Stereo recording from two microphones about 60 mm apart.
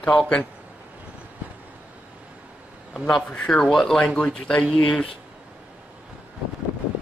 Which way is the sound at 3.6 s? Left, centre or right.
Centre.